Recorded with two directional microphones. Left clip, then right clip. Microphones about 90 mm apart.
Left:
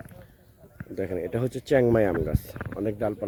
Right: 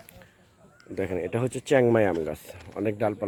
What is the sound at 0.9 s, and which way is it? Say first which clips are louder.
Speech: right 1 dB; 5° right (ahead or behind).